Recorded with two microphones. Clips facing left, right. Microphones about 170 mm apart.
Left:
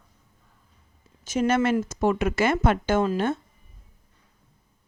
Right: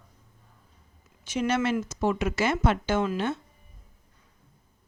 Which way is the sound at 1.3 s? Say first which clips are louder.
Left 4 dB; 45° left (ahead or behind).